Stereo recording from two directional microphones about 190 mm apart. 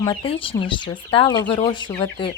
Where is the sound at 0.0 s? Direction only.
25° left (ahead or behind).